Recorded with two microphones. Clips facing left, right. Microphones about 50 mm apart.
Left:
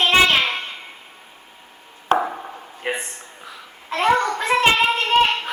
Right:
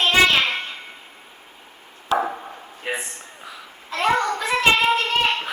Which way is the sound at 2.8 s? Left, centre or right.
Left.